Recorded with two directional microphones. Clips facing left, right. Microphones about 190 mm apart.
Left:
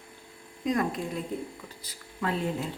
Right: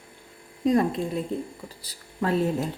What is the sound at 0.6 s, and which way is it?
Speech, 30° right (ahead or behind).